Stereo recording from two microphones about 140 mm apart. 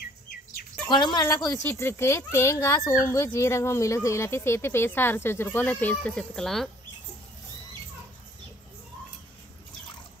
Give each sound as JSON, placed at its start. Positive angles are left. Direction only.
{"t": 0.8, "sound": "a child's voice", "side_deg": 30}